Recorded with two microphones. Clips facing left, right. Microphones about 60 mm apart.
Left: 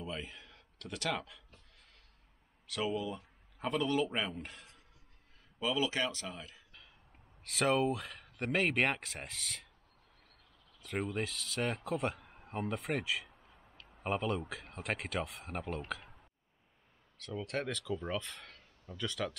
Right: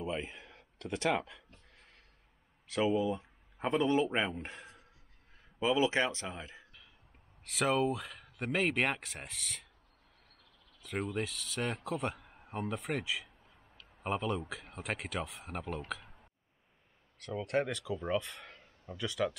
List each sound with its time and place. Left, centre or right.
0.0 s a sound: right
2.6 s speech: right
7.5 s speech: centre
10.8 s speech: centre
17.2 s speech: right
18.5 s a sound: centre
19.0 s speech: centre